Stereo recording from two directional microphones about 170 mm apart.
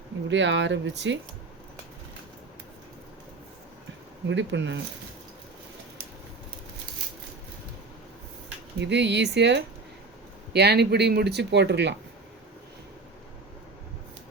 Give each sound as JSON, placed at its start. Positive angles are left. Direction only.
{"t": 0.3, "sound": "speech", "side_deg": -90}
{"t": 4.3, "sound": "speech", "side_deg": -90}
{"t": 8.8, "sound": "speech", "side_deg": -90}
{"t": 10.5, "sound": "speech", "side_deg": -75}